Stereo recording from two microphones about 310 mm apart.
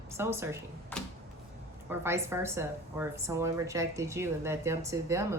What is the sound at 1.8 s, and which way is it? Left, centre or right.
Speech, centre.